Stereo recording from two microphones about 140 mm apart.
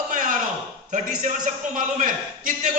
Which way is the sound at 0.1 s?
65° right (ahead or behind).